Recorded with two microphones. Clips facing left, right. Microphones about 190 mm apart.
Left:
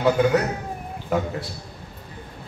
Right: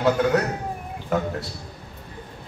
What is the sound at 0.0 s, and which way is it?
Speech, centre (ahead or behind).